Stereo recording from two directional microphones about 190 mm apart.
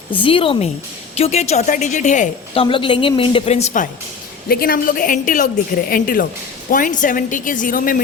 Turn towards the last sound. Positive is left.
turn(degrees=45)  # may be behind; listen again after turning